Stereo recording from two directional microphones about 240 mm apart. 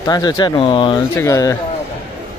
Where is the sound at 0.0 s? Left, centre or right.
Centre.